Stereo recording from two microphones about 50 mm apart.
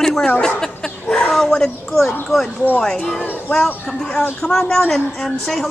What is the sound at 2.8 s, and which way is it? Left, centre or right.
A woman's voice, centre.